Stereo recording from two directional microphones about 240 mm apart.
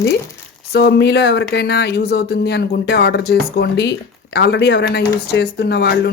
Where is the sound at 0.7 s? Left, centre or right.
Left.